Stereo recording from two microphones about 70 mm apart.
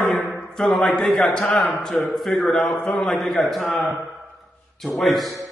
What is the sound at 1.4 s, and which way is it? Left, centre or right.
Mantra, centre.